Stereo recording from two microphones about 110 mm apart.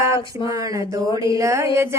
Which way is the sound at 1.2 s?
30° right (ahead or behind).